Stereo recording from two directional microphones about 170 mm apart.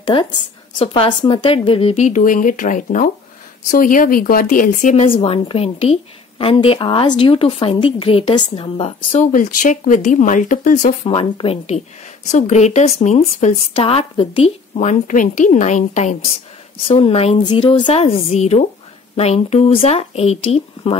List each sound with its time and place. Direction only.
0.0 s a woman's voice: 30° left (ahead or behind); by 5.0 s 50° left (ahead or behind)
5.0 s a woman's voice: 35° left (ahead or behind)
9.2 s speech: 50° left (ahead or behind)
11.1 s a woman's voice: 35° left (ahead or behind)